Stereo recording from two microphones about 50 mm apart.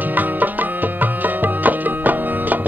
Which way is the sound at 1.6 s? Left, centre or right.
Right.